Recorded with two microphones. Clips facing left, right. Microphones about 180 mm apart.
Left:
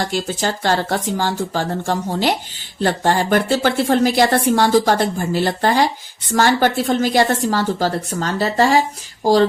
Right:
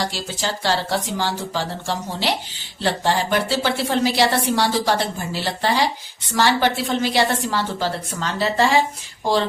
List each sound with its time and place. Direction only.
0.0 s a woman's voice: 50° left (ahead or behind)